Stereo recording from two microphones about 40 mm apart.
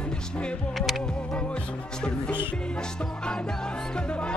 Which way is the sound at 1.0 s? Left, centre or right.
Left.